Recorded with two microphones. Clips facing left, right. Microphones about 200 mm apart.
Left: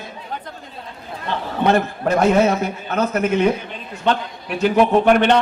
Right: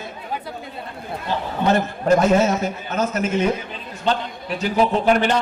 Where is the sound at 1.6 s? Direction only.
60° left (ahead or behind).